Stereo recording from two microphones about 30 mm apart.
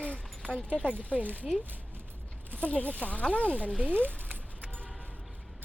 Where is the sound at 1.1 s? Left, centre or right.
Right.